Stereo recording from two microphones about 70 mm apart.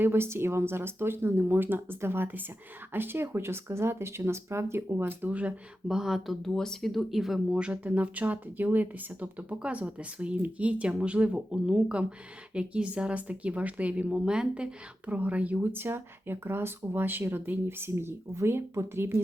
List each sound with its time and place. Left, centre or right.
0.0 s speech: right
5.3 s a woman's voice: centre
5.9 s speech: centre
7.5 s a woman's voice: centre; by 19.2 s right